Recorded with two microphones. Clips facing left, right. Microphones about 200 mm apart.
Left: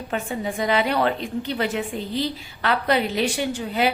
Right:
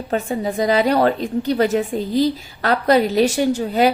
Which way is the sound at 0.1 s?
40° right (ahead or behind).